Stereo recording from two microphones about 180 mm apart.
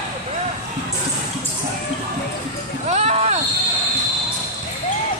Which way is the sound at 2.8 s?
35° right (ahead or behind).